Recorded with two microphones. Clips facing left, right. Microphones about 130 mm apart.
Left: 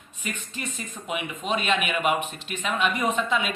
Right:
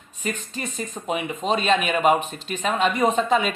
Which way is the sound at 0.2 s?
40° right (ahead or behind).